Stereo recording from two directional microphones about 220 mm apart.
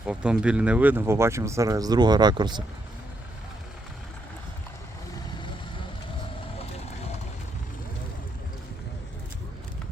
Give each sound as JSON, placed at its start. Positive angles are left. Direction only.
{"t": 0.0, "sound": "speech", "side_deg": -5}